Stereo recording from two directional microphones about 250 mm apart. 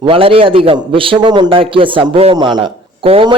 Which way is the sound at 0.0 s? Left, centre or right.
Right.